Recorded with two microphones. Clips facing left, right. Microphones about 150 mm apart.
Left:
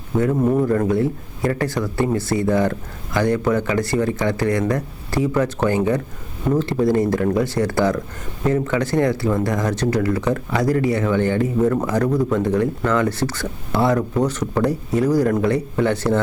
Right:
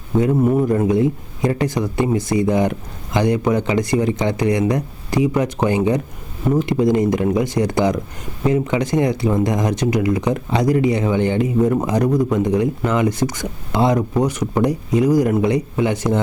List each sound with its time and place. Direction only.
0.2 s speech: 15° right (ahead or behind)